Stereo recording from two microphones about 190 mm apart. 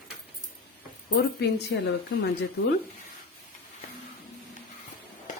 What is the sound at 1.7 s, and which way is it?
Speech, 55° left (ahead or behind).